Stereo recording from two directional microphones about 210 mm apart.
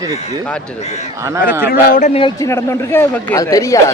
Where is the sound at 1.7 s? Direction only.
35° left (ahead or behind).